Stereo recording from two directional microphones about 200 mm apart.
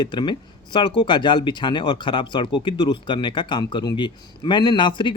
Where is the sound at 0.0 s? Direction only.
20° left (ahead or behind).